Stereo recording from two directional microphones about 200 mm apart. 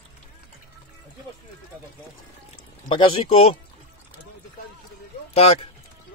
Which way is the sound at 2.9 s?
30° left (ahead or behind).